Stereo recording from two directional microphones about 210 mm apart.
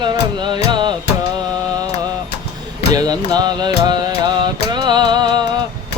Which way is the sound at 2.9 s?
20° right (ahead or behind).